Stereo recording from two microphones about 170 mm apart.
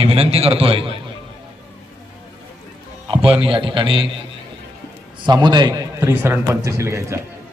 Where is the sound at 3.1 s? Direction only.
30° right (ahead or behind).